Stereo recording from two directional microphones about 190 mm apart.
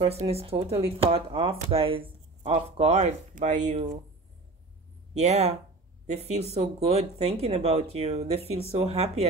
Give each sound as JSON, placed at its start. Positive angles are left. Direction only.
{"t": 0.0, "sound": "speech", "side_deg": -30}
{"t": 5.1, "sound": "speech", "side_deg": -35}